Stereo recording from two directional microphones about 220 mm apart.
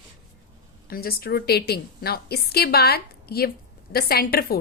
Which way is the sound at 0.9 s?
40° left (ahead or behind).